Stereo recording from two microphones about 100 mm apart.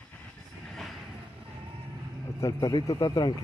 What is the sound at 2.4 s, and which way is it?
Speech, 35° left (ahead or behind).